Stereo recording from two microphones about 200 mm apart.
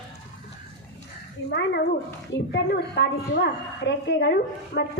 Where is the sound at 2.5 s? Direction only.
60° left (ahead or behind).